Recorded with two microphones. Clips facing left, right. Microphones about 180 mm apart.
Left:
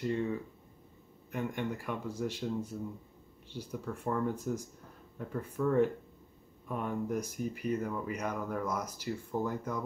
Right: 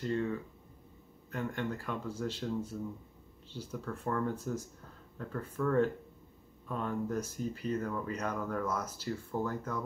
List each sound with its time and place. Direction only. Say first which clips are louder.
0.0 s speech: left 1 dB; 15° left (ahead or behind)